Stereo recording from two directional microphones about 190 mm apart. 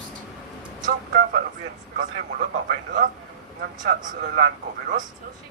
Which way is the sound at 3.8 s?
45° right (ahead or behind).